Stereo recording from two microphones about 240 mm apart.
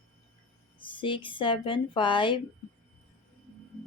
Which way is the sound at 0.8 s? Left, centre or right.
Left.